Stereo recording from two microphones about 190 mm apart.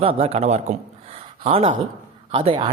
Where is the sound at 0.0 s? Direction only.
30° right (ahead or behind).